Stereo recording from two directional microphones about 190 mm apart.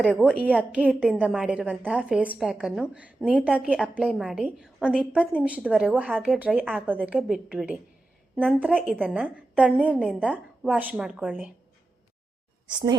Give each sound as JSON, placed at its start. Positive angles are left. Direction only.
{"t": 0.0, "sound": "a woman's voice", "side_deg": 0}
{"t": 8.8, "sound": "a woman's voice", "side_deg": -5}
{"t": 12.6, "sound": "a woman's voice", "side_deg": -20}